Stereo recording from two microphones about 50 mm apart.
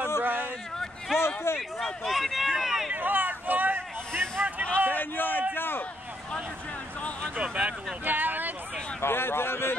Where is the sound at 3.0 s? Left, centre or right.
Right.